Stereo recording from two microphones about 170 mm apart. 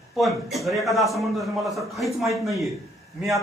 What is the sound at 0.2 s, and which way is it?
A man's voice, centre (ahead or behind).